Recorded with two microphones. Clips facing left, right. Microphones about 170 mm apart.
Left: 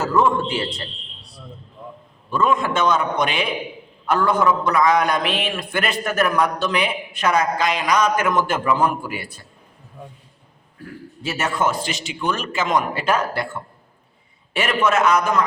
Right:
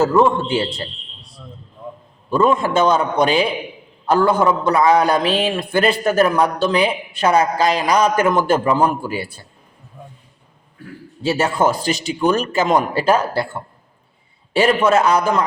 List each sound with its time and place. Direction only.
0.0 s a man's voice: 25° right (ahead or behind)
2.3 s a man's voice: 35° right (ahead or behind)
11.2 s a man's voice: 30° right (ahead or behind)